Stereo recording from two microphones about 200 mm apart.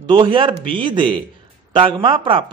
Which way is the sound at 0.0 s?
25° right (ahead or behind).